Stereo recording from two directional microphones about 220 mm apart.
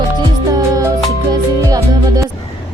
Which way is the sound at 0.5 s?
15° right (ahead or behind).